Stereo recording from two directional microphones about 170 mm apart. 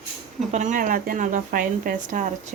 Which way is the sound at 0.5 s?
50° right (ahead or behind).